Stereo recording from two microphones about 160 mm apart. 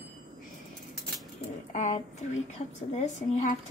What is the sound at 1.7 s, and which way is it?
Speech, 45° left (ahead or behind).